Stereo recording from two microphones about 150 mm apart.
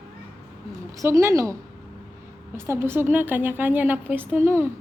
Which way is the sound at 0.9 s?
20° right (ahead or behind).